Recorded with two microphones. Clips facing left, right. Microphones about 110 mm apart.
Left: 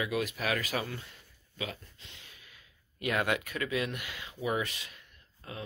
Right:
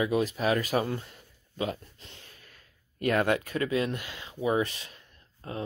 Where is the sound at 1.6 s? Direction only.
40° right (ahead or behind).